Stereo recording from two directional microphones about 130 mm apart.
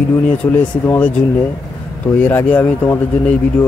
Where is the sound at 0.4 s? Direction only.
15° left (ahead or behind).